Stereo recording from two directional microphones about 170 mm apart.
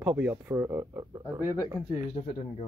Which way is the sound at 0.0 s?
5° right (ahead or behind).